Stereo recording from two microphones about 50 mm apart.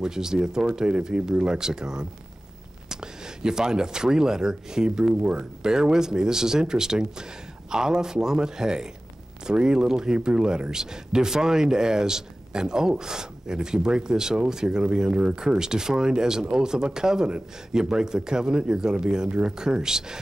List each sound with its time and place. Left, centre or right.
0.0 s speech: centre